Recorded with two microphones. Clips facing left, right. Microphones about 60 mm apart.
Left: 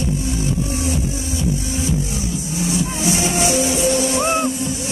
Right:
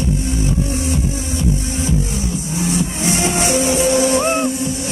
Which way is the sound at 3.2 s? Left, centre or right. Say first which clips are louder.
Right 3 dB; right.